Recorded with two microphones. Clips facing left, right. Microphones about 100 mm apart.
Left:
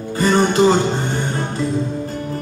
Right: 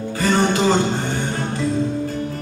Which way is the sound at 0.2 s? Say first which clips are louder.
Left 3 dB; 20° left (ahead or behind).